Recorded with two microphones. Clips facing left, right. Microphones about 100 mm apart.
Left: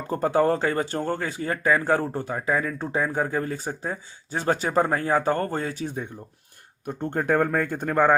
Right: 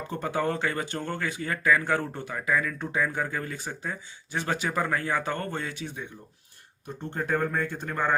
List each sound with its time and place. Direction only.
0.1 s speech: 35° left (ahead or behind)
6.8 s speech: 50° left (ahead or behind)